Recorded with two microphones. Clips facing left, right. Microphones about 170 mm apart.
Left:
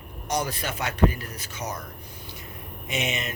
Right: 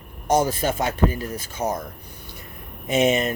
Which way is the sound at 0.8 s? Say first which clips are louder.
Right 2 dB; 30° right (ahead or behind).